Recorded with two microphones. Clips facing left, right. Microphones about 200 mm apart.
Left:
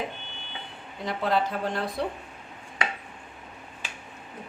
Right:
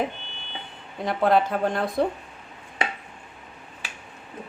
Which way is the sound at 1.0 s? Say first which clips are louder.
Right 5 dB; 55° right (ahead or behind).